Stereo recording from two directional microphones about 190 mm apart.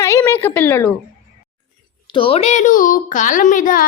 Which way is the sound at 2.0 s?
30° left (ahead or behind).